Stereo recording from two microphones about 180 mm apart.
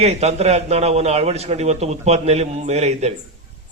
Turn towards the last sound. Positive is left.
turn(degrees=-35)  # may be behind; listen again after turning